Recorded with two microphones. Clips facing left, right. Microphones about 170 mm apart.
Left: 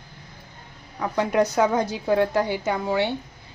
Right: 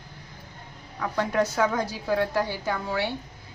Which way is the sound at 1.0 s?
20° left (ahead or behind).